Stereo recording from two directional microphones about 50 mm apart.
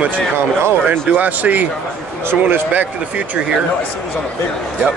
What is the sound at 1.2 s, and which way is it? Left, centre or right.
Speech, right.